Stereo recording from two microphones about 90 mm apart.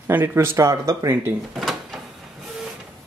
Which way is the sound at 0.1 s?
25° right (ahead or behind).